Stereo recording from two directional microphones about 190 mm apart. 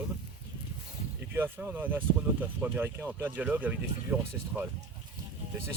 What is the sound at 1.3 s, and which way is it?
Speech, 10° right (ahead or behind).